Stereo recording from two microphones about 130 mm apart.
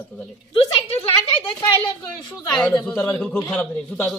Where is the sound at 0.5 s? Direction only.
45° left (ahead or behind).